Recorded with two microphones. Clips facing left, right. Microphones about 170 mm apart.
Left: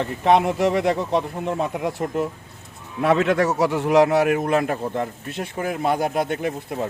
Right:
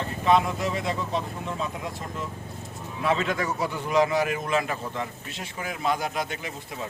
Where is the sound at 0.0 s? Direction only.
65° left (ahead or behind).